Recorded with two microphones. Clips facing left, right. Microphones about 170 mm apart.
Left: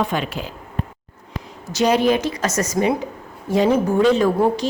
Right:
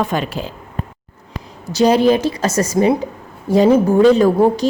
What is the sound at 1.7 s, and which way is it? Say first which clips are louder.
A woman's voice: right 4 dB; 35° right (ahead or behind).